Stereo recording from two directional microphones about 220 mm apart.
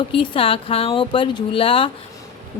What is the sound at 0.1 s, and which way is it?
A woman's voice, 25° left (ahead or behind).